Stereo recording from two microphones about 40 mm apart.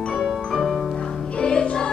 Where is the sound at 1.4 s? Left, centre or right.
Left.